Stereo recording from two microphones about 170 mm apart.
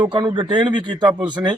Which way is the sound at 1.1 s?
10° right (ahead or behind).